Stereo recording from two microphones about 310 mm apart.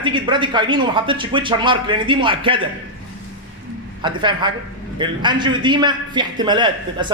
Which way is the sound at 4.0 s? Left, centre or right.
Centre.